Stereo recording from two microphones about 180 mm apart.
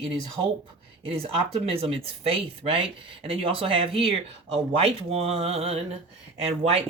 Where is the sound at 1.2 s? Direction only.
30° right (ahead or behind).